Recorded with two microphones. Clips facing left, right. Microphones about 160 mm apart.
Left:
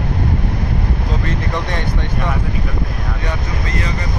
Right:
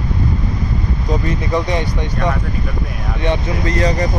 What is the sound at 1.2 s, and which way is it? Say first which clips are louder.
Speech: right 4 dB; 10° right (ahead or behind).